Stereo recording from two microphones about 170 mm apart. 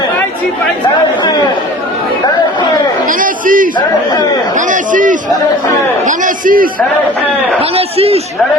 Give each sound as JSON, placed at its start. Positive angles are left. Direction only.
{"t": 3.1, "sound": "a man's voice", "side_deg": -55}
{"t": 3.8, "sound": "speech", "side_deg": 25}
{"t": 4.5, "sound": "a man's voice", "side_deg": -50}
{"t": 7.6, "sound": "a man's voice", "side_deg": -35}